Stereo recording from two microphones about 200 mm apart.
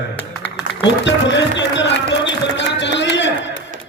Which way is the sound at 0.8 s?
60° left (ahead or behind).